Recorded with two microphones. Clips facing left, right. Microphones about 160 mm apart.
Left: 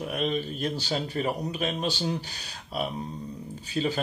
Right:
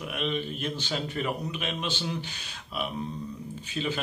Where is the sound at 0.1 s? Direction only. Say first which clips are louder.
Left 1 dB; 40° left (ahead or behind).